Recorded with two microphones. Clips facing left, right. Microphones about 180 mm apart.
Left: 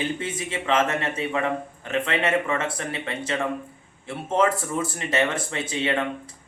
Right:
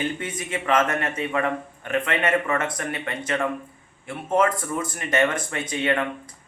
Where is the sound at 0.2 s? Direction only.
30° left (ahead or behind).